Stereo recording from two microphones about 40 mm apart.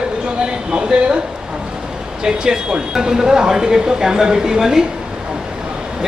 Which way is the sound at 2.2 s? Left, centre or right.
Centre.